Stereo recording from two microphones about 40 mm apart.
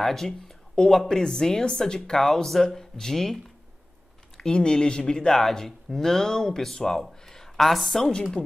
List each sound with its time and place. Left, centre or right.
0.0 s speech: centre
4.4 s speech: left; by 7.9 s centre
7.9 s speech: centre